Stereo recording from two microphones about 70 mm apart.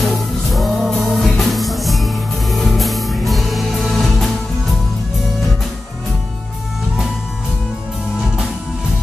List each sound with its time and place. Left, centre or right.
0.0 s music: centre